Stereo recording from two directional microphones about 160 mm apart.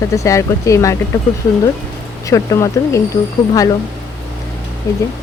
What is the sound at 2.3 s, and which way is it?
Speech, 20° left (ahead or behind).